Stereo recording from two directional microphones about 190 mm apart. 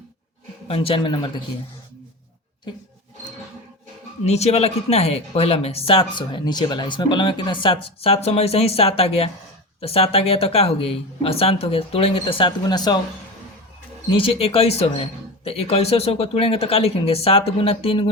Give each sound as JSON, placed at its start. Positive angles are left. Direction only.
{"t": 0.7, "sound": "a man's voice", "side_deg": 30}
{"t": 4.3, "sound": "speech", "side_deg": 35}
{"t": 14.2, "sound": "speech", "side_deg": 30}